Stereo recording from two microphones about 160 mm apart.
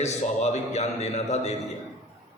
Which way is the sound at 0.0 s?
45° left (ahead or behind).